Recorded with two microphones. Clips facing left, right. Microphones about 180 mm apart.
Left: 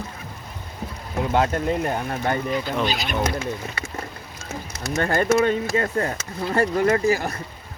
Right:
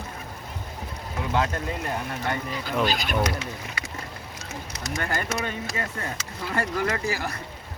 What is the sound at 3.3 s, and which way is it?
Speech, 25° left (ahead or behind).